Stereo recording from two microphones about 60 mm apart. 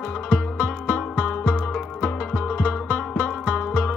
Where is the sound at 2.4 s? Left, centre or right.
Left.